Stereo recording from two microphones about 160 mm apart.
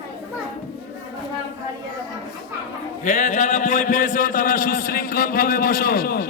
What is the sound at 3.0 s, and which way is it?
A man's voice, 50° left (ahead or behind).